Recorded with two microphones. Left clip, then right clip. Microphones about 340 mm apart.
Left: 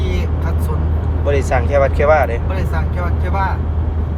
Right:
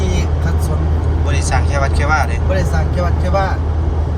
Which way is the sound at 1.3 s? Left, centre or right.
Centre.